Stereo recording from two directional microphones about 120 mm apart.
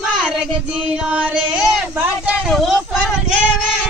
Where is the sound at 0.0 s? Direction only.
5° right (ahead or behind).